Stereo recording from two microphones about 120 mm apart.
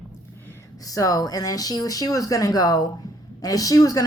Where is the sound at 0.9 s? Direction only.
30° left (ahead or behind).